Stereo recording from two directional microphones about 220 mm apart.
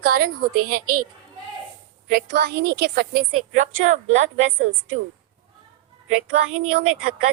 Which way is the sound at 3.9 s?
30° right (ahead or behind).